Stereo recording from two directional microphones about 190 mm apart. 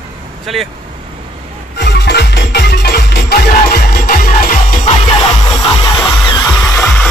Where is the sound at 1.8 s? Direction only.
60° left (ahead or behind).